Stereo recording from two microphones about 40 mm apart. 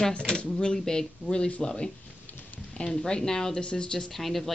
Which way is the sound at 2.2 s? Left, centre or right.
Left.